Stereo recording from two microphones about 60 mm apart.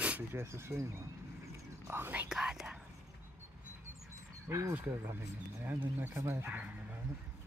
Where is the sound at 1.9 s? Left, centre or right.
Right.